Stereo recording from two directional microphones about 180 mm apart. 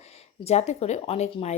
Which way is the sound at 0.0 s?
35° left (ahead or behind).